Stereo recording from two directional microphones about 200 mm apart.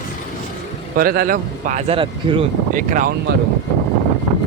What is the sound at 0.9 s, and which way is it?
Speech, 45° right (ahead or behind).